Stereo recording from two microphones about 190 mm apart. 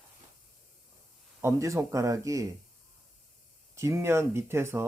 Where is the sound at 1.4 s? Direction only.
15° right (ahead or behind).